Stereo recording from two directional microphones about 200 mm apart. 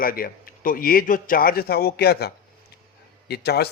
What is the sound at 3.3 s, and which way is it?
Speech, 55° left (ahead or behind).